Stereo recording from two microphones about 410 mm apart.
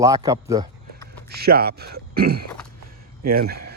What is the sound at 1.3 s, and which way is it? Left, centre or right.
Speech, right.